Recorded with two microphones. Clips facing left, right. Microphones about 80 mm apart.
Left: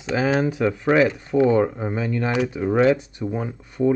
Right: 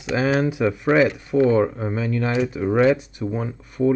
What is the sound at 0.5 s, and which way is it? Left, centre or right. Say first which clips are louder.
Speech: even; centre.